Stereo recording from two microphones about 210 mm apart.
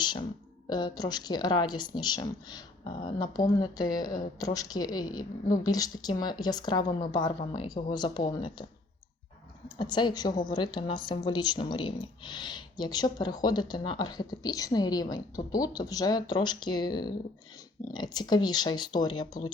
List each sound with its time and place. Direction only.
0.0 s speech: 20° left (ahead or behind)
9.6 s speech: 20° left (ahead or behind)